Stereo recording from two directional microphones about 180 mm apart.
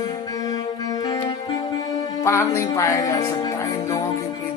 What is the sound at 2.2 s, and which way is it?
Speech, 15° left (ahead or behind).